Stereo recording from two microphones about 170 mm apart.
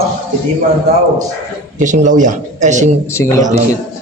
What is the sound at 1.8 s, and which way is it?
Speech, 45° right (ahead or behind).